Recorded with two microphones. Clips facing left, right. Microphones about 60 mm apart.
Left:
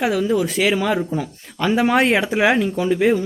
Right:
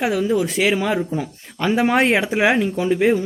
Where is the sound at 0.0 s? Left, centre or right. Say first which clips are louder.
Even; centre.